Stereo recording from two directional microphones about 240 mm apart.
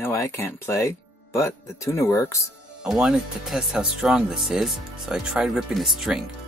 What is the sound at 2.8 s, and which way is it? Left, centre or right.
Speech, centre.